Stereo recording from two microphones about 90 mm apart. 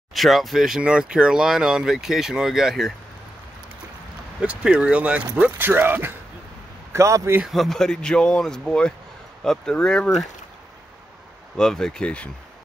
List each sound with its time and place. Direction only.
0.1 s speech: centre (ahead or behind)
4.4 s a man's voice: 10° right (ahead or behind); by 7.3 s 35° right (ahead or behind)
7.4 s speech: centre (ahead or behind)
11.5 s speech: 5° left (ahead or behind)